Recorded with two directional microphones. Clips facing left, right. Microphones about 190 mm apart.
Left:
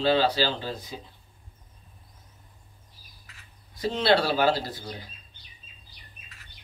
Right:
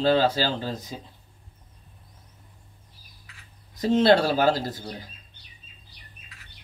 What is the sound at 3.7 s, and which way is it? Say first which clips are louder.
Speech: right 5 dB; 45° right (ahead or behind).